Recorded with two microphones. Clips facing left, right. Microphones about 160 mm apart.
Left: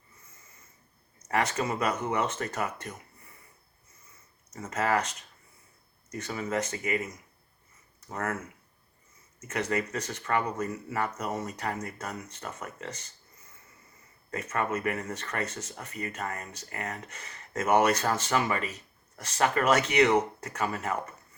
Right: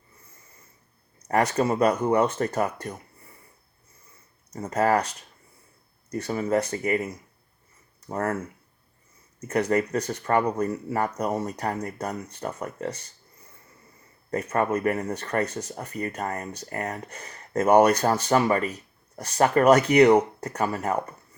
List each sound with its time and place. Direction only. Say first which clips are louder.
1.3 s speech: right 6 dB; 35° right (ahead or behind)
4.5 s speech: right 6 dB; 35° right (ahead or behind)
9.5 s speech: right 7 dB; 35° right (ahead or behind)
14.3 s speech: right 6 dB; 35° right (ahead or behind)